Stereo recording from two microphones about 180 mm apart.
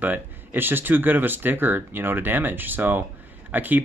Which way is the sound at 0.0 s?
10° right (ahead or behind).